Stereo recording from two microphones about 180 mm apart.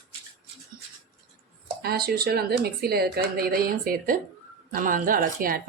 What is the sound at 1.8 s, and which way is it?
Speech, 60° right (ahead or behind).